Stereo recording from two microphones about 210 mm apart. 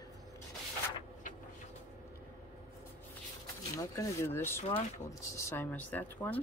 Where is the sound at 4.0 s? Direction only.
10° left (ahead or behind).